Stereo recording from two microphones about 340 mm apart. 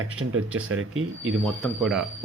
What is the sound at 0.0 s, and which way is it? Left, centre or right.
Speech, right.